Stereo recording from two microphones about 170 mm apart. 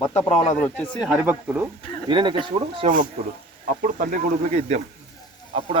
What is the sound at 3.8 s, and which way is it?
Speech, 50° right (ahead or behind).